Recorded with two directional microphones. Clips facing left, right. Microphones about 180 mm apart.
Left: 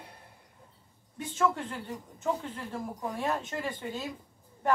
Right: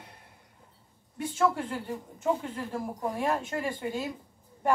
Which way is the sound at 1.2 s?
10° right (ahead or behind).